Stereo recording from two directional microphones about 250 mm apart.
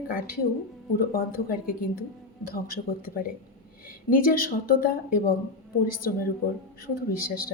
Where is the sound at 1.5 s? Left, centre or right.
Left.